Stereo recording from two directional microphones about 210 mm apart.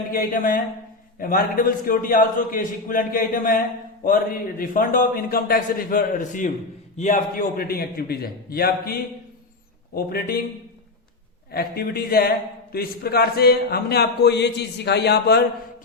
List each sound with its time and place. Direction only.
0.1 s a man's voice: 40° left (ahead or behind)
11.5 s speech: 45° left (ahead or behind)